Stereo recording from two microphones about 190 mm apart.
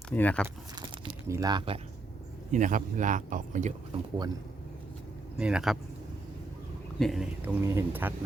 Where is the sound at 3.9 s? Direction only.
30° right (ahead or behind).